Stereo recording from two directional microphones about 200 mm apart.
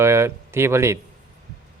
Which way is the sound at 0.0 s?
15° right (ahead or behind).